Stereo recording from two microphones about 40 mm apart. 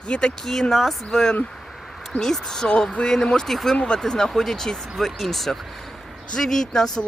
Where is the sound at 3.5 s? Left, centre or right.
Centre.